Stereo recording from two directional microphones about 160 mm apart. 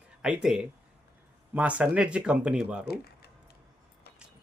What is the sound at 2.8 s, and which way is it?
Speech, 75° left (ahead or behind).